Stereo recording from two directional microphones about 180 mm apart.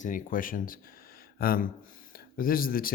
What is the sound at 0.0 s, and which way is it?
Speech, 50° left (ahead or behind).